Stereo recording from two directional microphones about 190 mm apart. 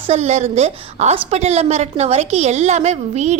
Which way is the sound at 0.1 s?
35° right (ahead or behind).